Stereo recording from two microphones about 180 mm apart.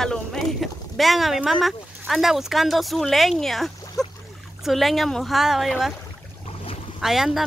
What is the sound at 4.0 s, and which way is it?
Boat, centre (ahead or behind).